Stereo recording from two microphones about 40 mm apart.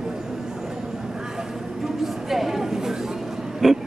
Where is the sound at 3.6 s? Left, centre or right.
Centre.